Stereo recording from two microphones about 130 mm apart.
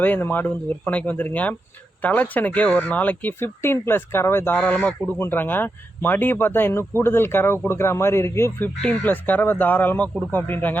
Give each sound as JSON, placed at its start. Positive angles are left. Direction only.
{"t": 0.0, "sound": "speech", "side_deg": 15}